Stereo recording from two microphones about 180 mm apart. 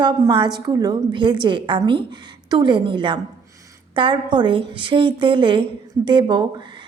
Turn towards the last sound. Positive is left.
turn(degrees=-25)  # may be behind; listen again after turning